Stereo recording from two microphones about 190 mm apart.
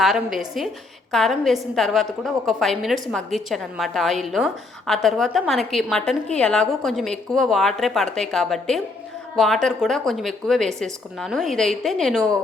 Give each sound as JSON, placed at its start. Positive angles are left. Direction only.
{"t": 0.0, "sound": "a woman's voice", "side_deg": 0}